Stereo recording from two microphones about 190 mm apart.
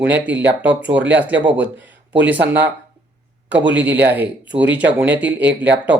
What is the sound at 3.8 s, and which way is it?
A man's voice, 10° right (ahead or behind).